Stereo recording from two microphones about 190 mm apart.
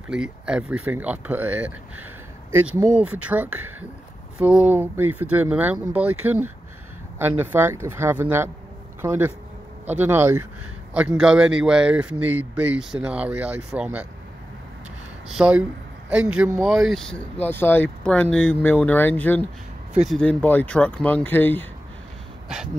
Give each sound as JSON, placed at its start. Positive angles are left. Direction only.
{"t": 0.1, "sound": "speech", "side_deg": -5}
{"t": 2.9, "sound": "speech", "side_deg": -5}
{"t": 15.3, "sound": "speech", "side_deg": -5}
{"t": 22.5, "sound": "speech", "side_deg": -5}